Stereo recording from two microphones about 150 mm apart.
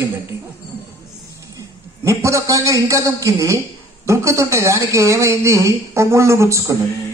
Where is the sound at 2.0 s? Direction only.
20° right (ahead or behind).